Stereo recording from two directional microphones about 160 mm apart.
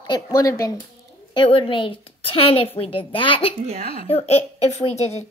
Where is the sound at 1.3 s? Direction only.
30° left (ahead or behind).